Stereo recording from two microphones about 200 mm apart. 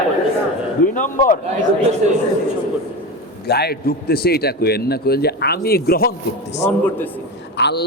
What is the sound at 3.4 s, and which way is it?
A man's voice, 55° left (ahead or behind).